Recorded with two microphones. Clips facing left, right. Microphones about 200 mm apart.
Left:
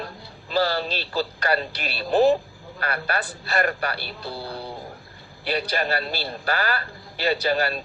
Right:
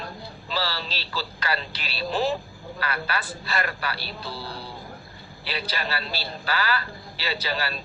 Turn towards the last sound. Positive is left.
turn(degrees=50)  # may be behind; listen again after turning